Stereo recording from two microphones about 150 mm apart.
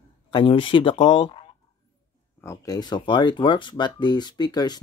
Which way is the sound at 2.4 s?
20° left (ahead or behind).